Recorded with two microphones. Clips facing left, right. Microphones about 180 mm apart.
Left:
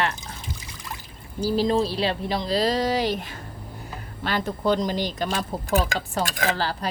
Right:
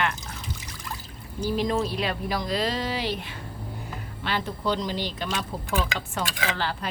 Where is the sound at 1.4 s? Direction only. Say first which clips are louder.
Left 4 dB; 30° left (ahead or behind).